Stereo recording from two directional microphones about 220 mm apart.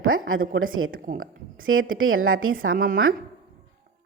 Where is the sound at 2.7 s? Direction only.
40° right (ahead or behind).